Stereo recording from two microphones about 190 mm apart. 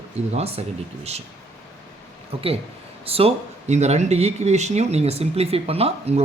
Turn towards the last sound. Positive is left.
turn(degrees=-30)  # may be behind; listen again after turning